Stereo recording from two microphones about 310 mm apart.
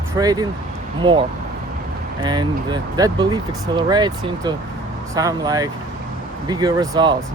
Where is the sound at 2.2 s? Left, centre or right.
Centre.